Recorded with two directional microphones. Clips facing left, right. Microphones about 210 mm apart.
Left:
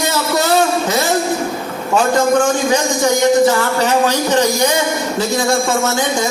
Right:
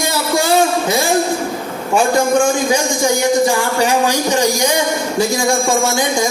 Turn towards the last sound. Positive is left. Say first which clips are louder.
# right 1 dB
turn(degrees=-10)  # may be behind; listen again after turning